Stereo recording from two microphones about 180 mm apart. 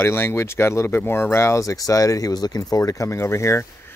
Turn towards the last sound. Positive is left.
turn(degrees=15)  # may be behind; listen again after turning